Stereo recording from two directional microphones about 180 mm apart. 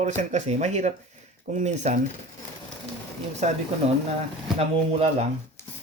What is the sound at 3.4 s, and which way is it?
Speech, 40° right (ahead or behind).